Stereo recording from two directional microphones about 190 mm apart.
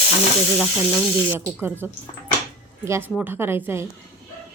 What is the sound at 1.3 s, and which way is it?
A woman's voice, 10° right (ahead or behind).